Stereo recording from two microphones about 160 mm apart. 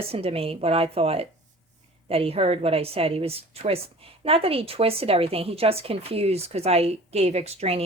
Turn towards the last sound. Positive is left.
turn(degrees=-40)  # may be behind; listen again after turning